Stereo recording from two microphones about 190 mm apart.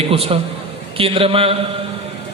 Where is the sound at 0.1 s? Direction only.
30° right (ahead or behind).